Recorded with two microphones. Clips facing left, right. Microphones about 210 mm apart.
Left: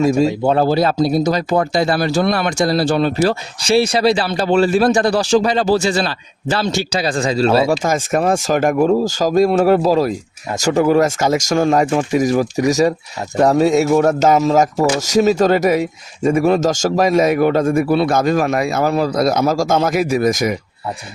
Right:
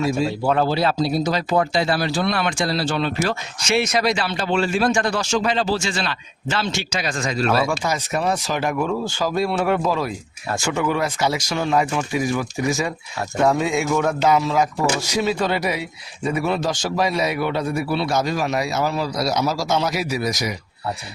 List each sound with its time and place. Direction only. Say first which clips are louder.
0.4 s speech: left 5 dB; 35° left (ahead or behind)
7.7 s speech: left 7 dB; 45° left (ahead or behind)